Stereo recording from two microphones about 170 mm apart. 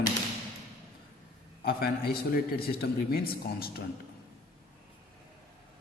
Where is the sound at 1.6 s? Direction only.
65° left (ahead or behind).